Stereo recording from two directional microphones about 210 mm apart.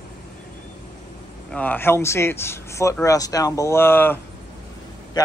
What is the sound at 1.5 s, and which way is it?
Speech, 5° left (ahead or behind).